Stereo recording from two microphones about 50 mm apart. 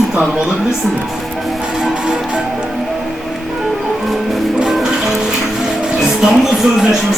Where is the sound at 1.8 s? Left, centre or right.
Centre.